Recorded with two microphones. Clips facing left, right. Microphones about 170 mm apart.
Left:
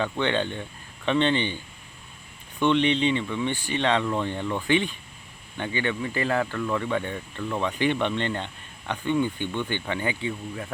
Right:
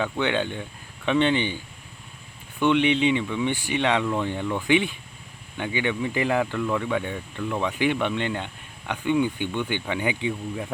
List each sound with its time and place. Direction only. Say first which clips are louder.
0.0 s speech: right 1 dB; 10° right (ahead or behind)
2.6 s speech: right 1 dB; 10° right (ahead or behind)